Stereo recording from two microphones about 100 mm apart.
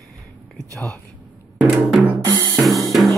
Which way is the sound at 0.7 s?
5° left (ahead or behind).